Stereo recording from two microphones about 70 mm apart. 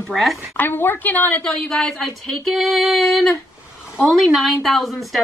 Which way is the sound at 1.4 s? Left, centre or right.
Centre.